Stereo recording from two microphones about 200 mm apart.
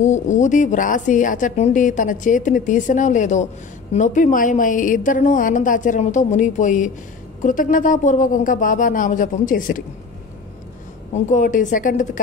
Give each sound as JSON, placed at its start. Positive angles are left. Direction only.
{"t": 0.0, "sound": "a woman's voice", "side_deg": 35}
{"t": 11.2, "sound": "a woman's voice", "side_deg": 40}